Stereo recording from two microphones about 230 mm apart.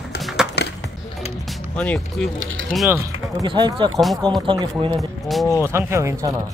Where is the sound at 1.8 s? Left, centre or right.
Centre.